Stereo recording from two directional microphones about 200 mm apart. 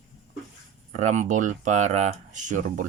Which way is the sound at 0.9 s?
35° right (ahead or behind).